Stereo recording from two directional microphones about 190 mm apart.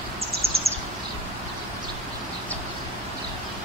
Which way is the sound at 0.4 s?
30° right (ahead or behind).